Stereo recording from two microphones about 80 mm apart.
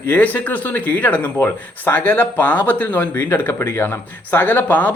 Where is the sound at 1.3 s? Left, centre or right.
Left.